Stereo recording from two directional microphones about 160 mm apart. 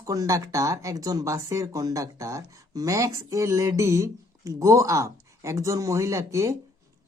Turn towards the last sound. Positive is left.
turn(degrees=-20)  # may be behind; listen again after turning